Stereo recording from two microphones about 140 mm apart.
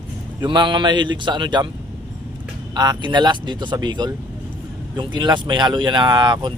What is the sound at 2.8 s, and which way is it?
Speech, 30° right (ahead or behind).